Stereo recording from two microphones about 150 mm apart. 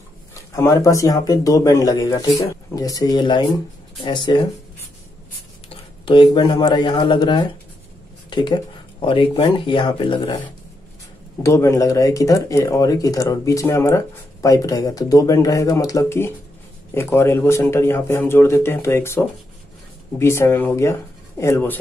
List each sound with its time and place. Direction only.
0.6 s speech: 20° left (ahead or behind)
6.3 s speech: 30° left (ahead or behind)
11.4 s a man's voice: 20° left (ahead or behind)